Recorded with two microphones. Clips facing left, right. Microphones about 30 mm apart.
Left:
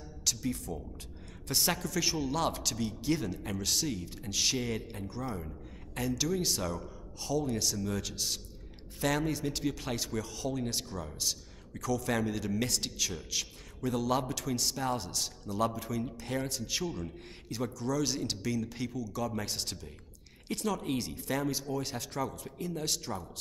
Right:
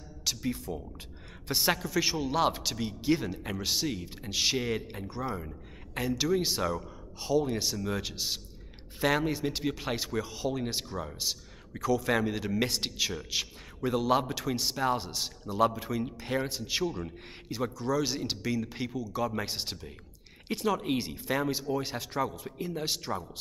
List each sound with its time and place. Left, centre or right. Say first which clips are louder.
0.2 s a man's voice: right 1 dB; right